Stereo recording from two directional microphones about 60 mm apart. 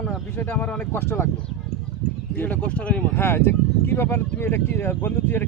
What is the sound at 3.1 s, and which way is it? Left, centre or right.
Speech, left.